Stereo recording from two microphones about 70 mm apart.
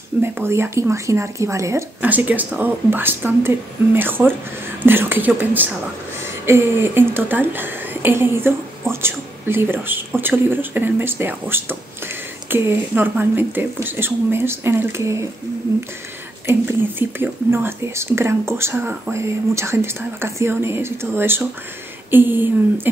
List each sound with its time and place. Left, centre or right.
0.2 s speech: right
2.0 s speech: right
6.2 s speech: right
16.5 s speech: right
19.1 s speech: right